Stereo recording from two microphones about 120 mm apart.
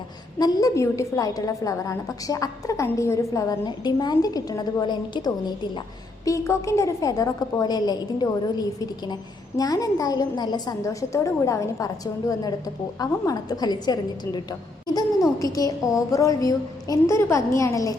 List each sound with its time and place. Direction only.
0.3 s a woman's voice: 35° left (ahead or behind)
6.2 s a woman's voice: 25° left (ahead or behind)